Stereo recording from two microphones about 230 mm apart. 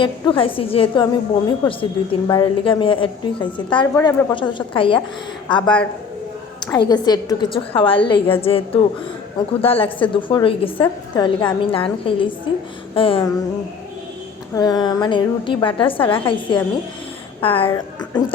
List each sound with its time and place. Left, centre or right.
0.0 s a woman's voice: left
14.5 s a woman's voice: centre